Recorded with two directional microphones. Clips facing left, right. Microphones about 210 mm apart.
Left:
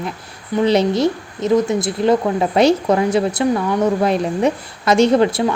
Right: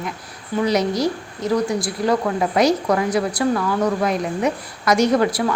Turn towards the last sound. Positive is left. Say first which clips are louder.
# left 4 dB
turn(degrees=25)  # may be behind; listen again after turning